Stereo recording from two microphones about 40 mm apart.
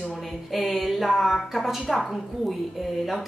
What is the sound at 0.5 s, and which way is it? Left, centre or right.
A woman's voice, centre.